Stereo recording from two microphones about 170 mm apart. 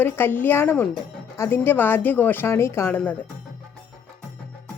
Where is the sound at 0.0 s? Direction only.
10° left (ahead or behind).